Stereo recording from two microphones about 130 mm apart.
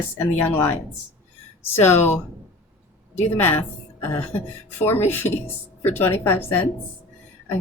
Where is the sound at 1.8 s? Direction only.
15° left (ahead or behind).